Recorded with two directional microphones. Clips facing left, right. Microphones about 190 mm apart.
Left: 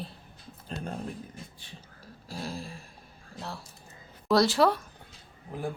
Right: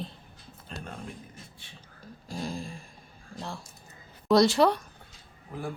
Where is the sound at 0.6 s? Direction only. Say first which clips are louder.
Left 5 dB; 35° left (ahead or behind).